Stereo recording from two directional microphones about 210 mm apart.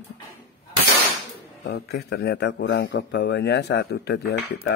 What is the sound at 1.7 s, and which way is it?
Speech, 50° left (ahead or behind).